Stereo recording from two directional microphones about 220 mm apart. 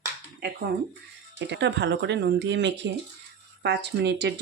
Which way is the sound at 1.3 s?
55° right (ahead or behind).